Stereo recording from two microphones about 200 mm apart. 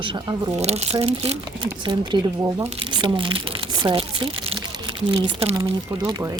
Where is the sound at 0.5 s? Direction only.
30° right (ahead or behind).